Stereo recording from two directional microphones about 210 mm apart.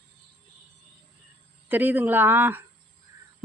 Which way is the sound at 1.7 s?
10° right (ahead or behind).